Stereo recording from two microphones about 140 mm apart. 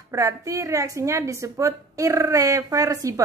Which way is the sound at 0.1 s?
25° right (ahead or behind).